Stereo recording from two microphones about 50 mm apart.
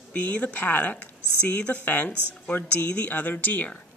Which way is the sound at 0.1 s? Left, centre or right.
Left.